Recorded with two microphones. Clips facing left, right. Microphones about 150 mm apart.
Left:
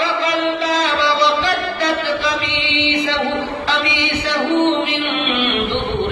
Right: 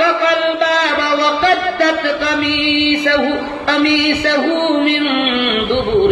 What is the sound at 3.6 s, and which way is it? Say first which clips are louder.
Mantra: right 7 dB; 60° right (ahead or behind).